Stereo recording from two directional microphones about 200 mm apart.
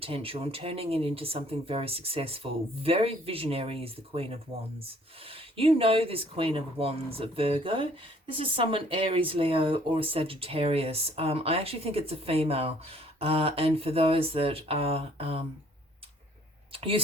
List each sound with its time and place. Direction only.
0.0 s speech: 30° right (ahead or behind)
16.7 s speech: 30° right (ahead or behind)